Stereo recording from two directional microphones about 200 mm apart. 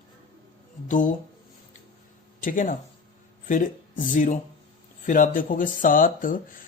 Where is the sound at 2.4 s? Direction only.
40° left (ahead or behind).